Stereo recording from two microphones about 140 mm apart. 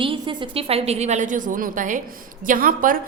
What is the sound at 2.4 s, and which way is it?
Speech, 80° right.